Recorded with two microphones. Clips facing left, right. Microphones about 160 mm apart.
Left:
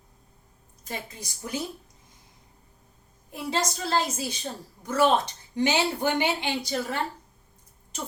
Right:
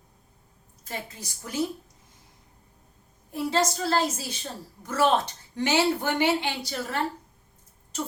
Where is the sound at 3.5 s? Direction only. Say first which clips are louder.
Right 2 dB; 15° left (ahead or behind).